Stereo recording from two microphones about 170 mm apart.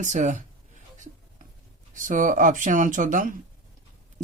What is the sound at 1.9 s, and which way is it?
Speech, 50° right (ahead or behind).